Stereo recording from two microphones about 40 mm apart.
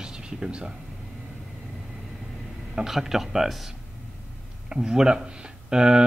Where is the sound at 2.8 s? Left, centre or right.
Centre.